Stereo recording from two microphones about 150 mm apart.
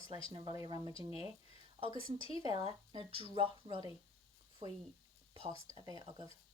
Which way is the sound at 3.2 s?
35° right (ahead or behind).